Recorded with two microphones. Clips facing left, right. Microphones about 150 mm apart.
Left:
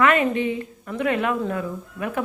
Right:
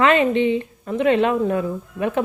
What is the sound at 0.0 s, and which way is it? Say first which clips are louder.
Speech: right 3 dB; 25° right (ahead or behind).